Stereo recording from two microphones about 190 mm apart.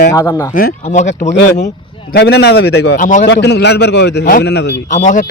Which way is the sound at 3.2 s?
65° left (ahead or behind).